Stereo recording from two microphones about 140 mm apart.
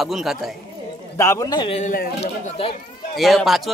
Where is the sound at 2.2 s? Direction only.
45° left (ahead or behind).